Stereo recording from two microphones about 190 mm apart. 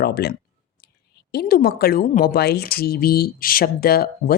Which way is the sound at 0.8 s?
55° left (ahead or behind).